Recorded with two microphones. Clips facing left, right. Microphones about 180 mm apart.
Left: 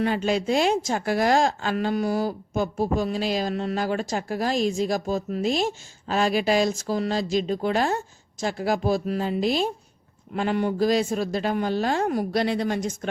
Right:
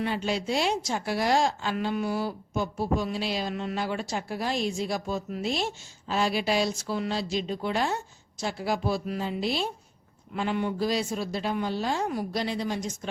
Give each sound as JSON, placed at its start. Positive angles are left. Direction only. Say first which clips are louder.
{"t": 0.0, "sound": "a woman's voice", "louder": "left 5 dB", "side_deg": 50}